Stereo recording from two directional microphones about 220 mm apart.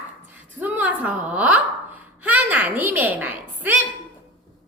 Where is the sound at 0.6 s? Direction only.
10° right (ahead or behind).